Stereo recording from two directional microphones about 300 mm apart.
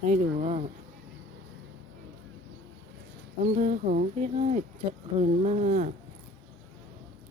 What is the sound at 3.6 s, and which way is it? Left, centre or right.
Speech, right.